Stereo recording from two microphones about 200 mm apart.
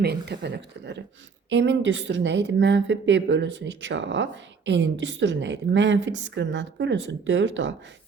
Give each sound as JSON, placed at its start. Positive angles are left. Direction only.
{"t": 0.0, "sound": "a woman's voice", "side_deg": -55}